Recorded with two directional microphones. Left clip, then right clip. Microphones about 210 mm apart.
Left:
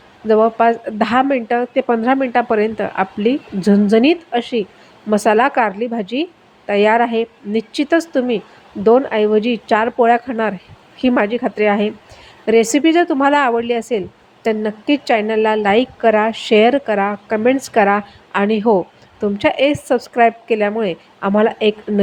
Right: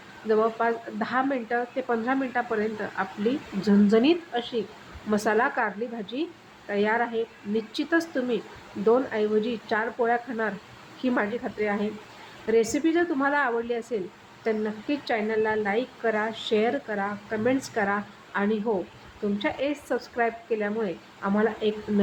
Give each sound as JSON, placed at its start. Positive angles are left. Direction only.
{"t": 0.3, "sound": "a woman's voice", "side_deg": 35}